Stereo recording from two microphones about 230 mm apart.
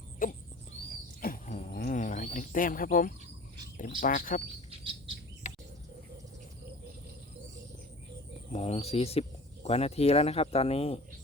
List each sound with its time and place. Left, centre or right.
0.2 s a sound: left
1.2 s wild animals: left
4.0 s speech: left
4.8 s chirp: right
8.5 s speech: left